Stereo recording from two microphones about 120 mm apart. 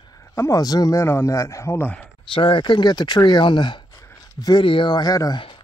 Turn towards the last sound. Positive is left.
turn(degrees=30)  # may be behind; listen again after turning